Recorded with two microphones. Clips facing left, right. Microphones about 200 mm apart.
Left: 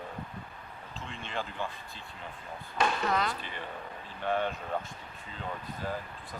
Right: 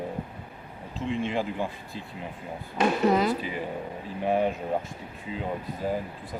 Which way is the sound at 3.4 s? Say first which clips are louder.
Right 9 dB; 5° right (ahead or behind).